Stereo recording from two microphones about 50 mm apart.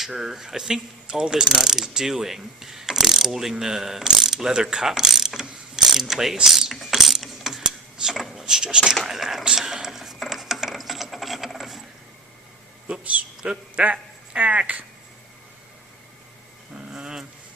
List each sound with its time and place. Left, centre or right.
0.0 s mechanisms: centre
6.4 s coin: centre
8.1 s a sound: centre
8.4 s mechanisms: centre
9.0 s speech: centre
9.6 s rub: centre
12.9 s a man's voice: right
16.7 s dog: centre